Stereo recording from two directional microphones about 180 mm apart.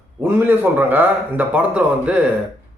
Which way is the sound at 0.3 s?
10° right (ahead or behind).